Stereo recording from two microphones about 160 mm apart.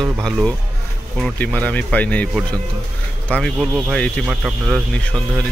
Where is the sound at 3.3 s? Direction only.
5° left (ahead or behind).